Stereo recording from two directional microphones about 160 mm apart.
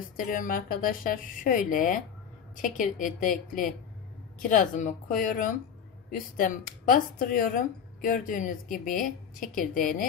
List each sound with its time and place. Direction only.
0.3 s speech: 55° left (ahead or behind)